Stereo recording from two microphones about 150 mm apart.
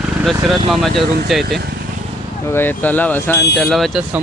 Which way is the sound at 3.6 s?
Centre (ahead or behind).